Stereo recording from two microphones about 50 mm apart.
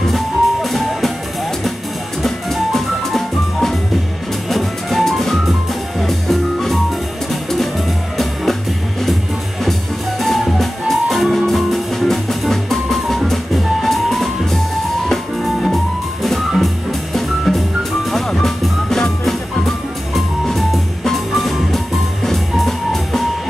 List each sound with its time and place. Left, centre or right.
0.1 s music: centre
2.2 s music: centre
9.7 s music: centre